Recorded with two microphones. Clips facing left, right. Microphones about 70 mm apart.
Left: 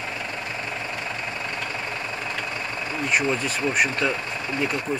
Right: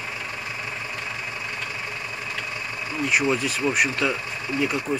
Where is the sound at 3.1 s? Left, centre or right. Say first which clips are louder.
Right 1 dB; centre.